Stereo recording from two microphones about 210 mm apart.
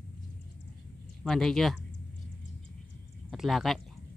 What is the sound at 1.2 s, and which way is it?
Speech, centre (ahead or behind).